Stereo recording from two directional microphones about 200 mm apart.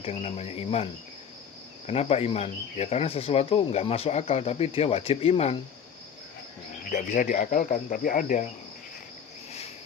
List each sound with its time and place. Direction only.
0.0 s speech: 30° left (ahead or behind)
1.9 s speech: 30° left (ahead or behind)
6.9 s speech: 40° left (ahead or behind)